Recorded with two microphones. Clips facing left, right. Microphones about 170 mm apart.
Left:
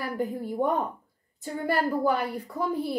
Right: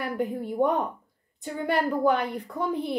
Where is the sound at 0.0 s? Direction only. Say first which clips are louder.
Right 1 dB; centre (ahead or behind).